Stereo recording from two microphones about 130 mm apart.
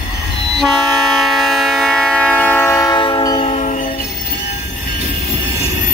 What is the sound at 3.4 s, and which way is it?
Music, 65° left (ahead or behind).